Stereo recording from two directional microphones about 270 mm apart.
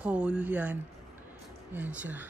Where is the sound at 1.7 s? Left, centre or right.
Centre.